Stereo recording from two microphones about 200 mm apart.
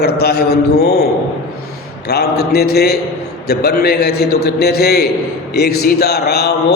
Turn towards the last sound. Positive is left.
turn(degrees=55)  # may be behind; listen again after turning